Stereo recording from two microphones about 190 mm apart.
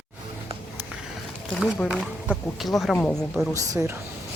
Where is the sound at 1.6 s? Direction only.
5° right (ahead or behind).